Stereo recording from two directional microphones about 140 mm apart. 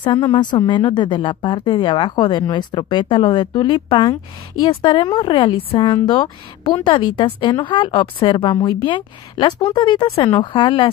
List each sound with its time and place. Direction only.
0.0 s a woman's voice: 35° left (ahead or behind)